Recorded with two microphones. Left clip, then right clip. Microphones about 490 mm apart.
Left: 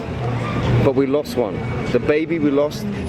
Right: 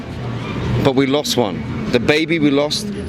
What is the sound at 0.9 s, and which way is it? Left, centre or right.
Speech, right.